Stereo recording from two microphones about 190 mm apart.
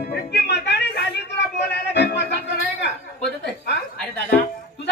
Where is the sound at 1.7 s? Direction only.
60° left (ahead or behind).